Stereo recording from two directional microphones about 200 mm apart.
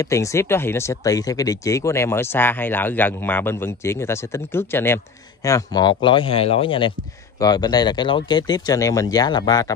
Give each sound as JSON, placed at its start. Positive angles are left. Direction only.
{"t": 0.0, "sound": "speech", "side_deg": 15}